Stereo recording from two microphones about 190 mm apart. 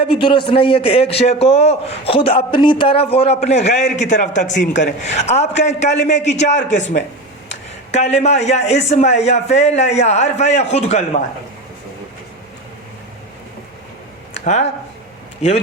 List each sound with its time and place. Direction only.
0.1 s a man's voice: 25° left (ahead or behind)
7.9 s a man's voice: 35° left (ahead or behind)
14.4 s speech: 40° left (ahead or behind)